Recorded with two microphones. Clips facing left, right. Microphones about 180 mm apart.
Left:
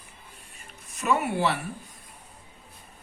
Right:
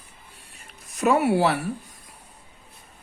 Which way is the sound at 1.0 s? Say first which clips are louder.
Right 5 dB; 55° right (ahead or behind).